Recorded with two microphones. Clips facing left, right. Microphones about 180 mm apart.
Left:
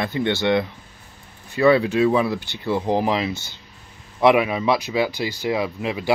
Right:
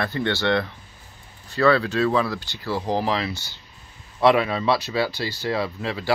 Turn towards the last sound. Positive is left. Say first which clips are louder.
# left 2 dB
turn(degrees=15)  # may be behind; listen again after turning